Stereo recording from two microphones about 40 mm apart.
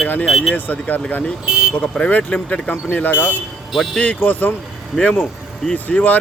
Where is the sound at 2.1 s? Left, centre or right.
Left.